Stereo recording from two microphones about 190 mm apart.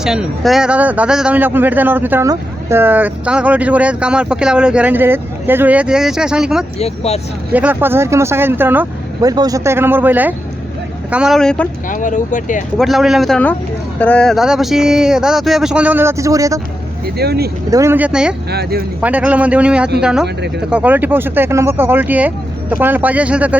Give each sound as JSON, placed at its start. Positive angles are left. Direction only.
{"t": 0.0, "sound": "speech", "side_deg": -5}
{"t": 6.7, "sound": "speech", "side_deg": 35}
{"t": 7.5, "sound": "speech", "side_deg": -10}
{"t": 11.9, "sound": "speech", "side_deg": 45}
{"t": 12.7, "sound": "speech", "side_deg": 0}
{"t": 17.2, "sound": "speech", "side_deg": -55}
{"t": 17.7, "sound": "speech", "side_deg": -15}
{"t": 18.5, "sound": "speech", "side_deg": -55}
{"t": 19.0, "sound": "speech", "side_deg": -5}